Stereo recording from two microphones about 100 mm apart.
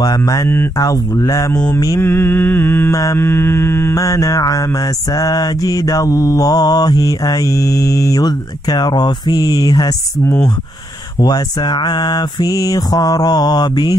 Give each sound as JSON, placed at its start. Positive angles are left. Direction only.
{"t": 0.0, "sound": "mantra", "side_deg": 40}
{"t": 2.0, "sound": "mantra", "side_deg": 20}
{"t": 2.9, "sound": "mantra", "side_deg": 30}